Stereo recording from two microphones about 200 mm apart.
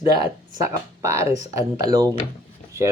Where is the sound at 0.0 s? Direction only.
20° right (ahead or behind).